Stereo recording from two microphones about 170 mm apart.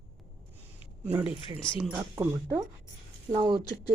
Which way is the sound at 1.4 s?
30° left (ahead or behind).